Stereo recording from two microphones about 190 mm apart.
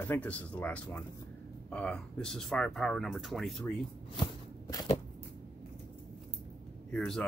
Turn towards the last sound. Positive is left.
turn(degrees=5)  # may be behind; listen again after turning